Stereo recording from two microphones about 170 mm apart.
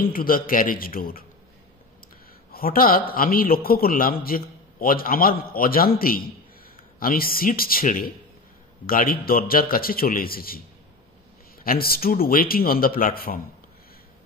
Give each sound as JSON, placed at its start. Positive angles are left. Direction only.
{"t": 0.0, "sound": "a man's voice", "side_deg": 60}
{"t": 2.5, "sound": "a man's voice", "side_deg": 60}
{"t": 11.6, "sound": "a man's voice", "side_deg": 60}